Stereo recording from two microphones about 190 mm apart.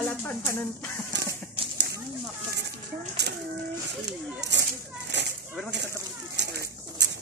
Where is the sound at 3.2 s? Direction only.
60° right (ahead or behind).